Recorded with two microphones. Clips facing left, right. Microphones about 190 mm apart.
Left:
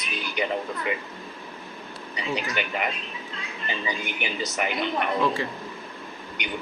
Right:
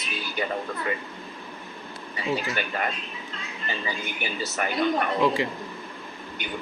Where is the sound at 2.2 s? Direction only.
15° left (ahead or behind).